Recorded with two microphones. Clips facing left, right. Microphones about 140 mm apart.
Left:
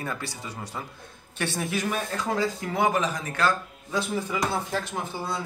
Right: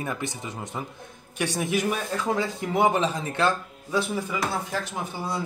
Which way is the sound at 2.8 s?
25° right (ahead or behind).